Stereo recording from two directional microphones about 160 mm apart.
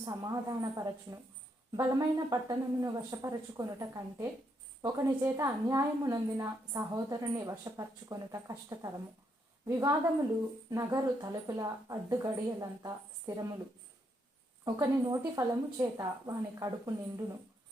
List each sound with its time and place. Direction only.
0.0 s a woman's voice: 20° right (ahead or behind)
14.6 s a woman's voice: 20° right (ahead or behind)